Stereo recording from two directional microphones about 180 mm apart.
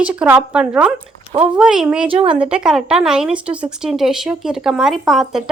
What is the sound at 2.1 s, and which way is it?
Speech, 30° right (ahead or behind).